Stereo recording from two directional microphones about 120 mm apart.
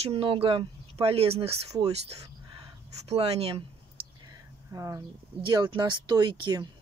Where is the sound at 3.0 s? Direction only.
55° right (ahead or behind).